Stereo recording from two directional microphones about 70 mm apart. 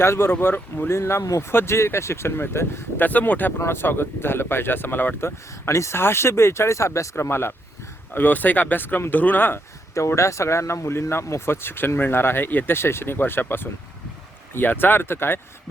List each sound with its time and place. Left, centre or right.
0.0 s speech: left
3.1 s speech: left
3.6 s speech: left
9.9 s speech: left